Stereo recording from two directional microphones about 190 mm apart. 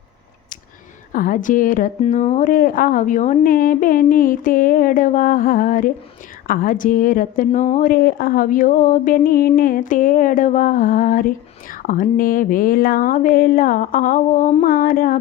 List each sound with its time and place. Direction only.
1.1 s a woman's voice: 45° left (ahead or behind)